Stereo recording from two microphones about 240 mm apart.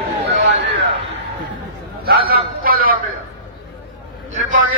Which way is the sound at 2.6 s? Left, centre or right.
Right.